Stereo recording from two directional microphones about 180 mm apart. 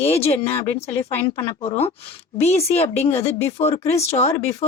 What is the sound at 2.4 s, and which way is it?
Speech, 35° left (ahead or behind).